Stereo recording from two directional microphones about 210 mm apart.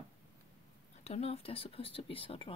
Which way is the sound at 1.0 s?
30° left (ahead or behind).